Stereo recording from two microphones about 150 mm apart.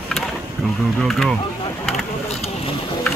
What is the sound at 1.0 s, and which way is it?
Speech, centre (ahead or behind).